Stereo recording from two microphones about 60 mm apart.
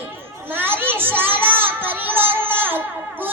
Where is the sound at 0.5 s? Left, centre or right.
Right.